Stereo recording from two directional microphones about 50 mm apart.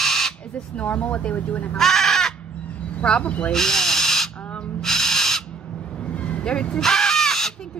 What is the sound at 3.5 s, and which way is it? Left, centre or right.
Owl, centre.